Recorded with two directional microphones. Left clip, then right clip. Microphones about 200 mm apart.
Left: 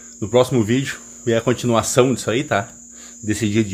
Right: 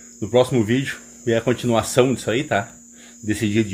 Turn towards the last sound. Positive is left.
turn(degrees=0)  # may be behind; listen again after turning